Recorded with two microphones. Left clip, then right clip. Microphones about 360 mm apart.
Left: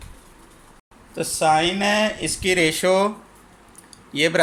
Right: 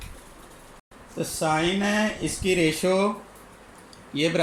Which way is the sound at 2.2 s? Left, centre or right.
Left.